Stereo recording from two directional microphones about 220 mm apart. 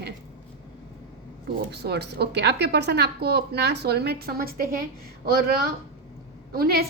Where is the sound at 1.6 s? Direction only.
50° right (ahead or behind).